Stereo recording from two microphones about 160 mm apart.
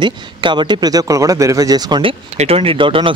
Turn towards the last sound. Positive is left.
turn(degrees=-30)  # may be behind; listen again after turning